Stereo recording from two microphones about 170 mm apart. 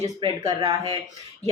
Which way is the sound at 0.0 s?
20° right (ahead or behind).